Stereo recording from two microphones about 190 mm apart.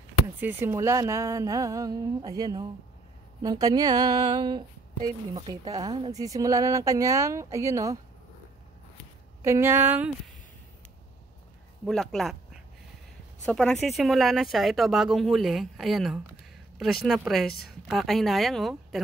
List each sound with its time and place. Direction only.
0.4 s speech: 10° right (ahead or behind)
9.4 s speech: 15° right (ahead or behind)
11.8 s speech: 5° left (ahead or behind)
13.5 s speech: 5° left (ahead or behind)
17.5 s speech: 55° left (ahead or behind)
17.8 s speech: centre (ahead or behind)